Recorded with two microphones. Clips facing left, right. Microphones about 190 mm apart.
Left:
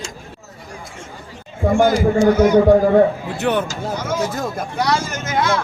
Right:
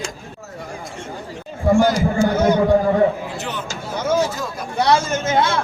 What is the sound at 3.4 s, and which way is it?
Speech, 60° left (ahead or behind).